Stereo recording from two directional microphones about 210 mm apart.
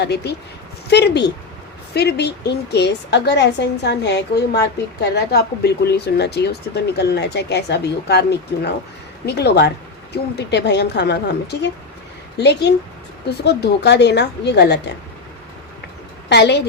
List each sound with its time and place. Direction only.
0.0 s a woman's voice: 55° left (ahead or behind)
12.4 s a woman's voice: 55° left (ahead or behind)
16.3 s a woman's voice: 55° left (ahead or behind)